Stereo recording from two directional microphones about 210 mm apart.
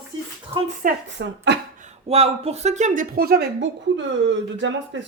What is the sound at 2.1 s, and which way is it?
A woman's voice, 30° right (ahead or behind).